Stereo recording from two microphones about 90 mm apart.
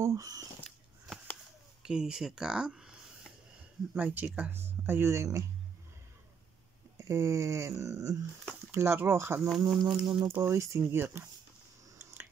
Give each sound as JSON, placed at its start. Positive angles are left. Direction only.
{"t": 0.0, "sound": "speech", "side_deg": -40}
{"t": 1.8, "sound": "speech", "side_deg": -5}
{"t": 3.9, "sound": "speech", "side_deg": -20}
{"t": 7.0, "sound": "a sound", "side_deg": -35}
{"t": 8.7, "sound": "speech", "side_deg": -30}
{"t": 9.8, "sound": "speech", "side_deg": -55}
{"t": 10.2, "sound": "speech", "side_deg": -25}
{"t": 12.0, "sound": "a sound", "side_deg": -25}